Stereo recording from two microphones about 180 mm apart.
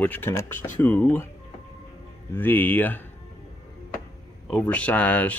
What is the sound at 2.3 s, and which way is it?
Speech, 10° left (ahead or behind).